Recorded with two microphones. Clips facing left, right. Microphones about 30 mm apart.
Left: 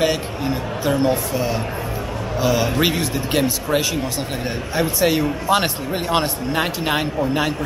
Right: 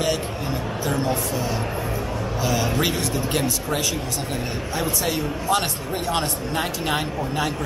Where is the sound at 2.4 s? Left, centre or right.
Centre.